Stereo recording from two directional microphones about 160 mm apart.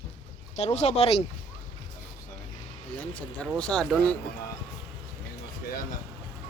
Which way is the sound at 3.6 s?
5° left (ahead or behind).